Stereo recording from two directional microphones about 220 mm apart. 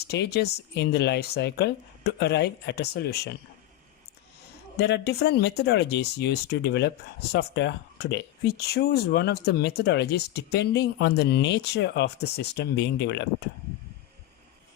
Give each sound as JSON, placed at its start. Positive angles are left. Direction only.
{"t": 0.0, "sound": "speech", "side_deg": 50}
{"t": 4.8, "sound": "speech", "side_deg": 50}